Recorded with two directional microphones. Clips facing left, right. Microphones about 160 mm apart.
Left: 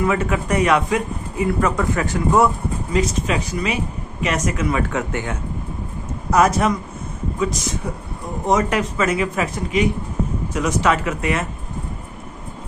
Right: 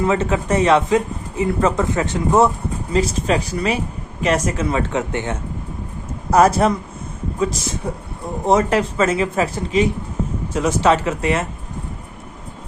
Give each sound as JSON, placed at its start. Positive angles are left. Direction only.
{"t": 0.0, "sound": "speech", "side_deg": -30}
{"t": 6.3, "sound": "speech", "side_deg": -35}